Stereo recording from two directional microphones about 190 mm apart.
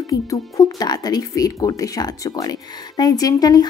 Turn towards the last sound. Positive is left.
turn(degrees=20)  # may be behind; listen again after turning